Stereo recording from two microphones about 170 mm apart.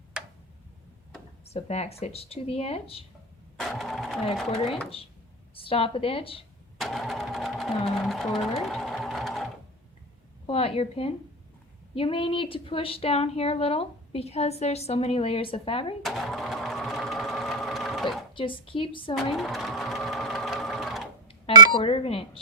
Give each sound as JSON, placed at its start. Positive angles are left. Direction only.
{"t": 1.5, "sound": "a woman's voice", "side_deg": 40}
{"t": 3.6, "sound": "engine", "side_deg": 0}
{"t": 5.5, "sound": "a woman's voice", "side_deg": 35}
{"t": 6.7, "sound": "speech", "side_deg": 0}
{"t": 10.4, "sound": "a woman's voice", "side_deg": 35}
{"t": 16.0, "sound": "sewing machine", "side_deg": 0}
{"t": 18.3, "sound": "a woman's voice", "side_deg": 30}
{"t": 19.1, "sound": "sewing machine", "side_deg": 0}
{"t": 21.7, "sound": "a woman's voice", "side_deg": 35}